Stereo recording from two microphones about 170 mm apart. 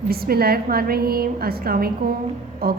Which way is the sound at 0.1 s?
65° right (ahead or behind).